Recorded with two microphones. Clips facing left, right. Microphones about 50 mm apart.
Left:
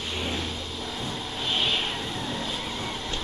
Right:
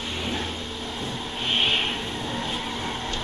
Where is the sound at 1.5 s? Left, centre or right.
Right.